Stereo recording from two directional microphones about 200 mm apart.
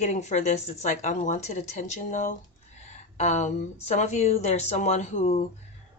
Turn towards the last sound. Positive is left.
turn(degrees=35)  # may be behind; listen again after turning